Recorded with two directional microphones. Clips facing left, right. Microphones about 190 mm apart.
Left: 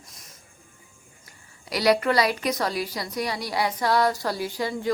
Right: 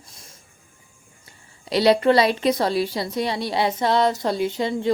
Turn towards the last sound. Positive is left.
turn(degrees=-25)  # may be behind; listen again after turning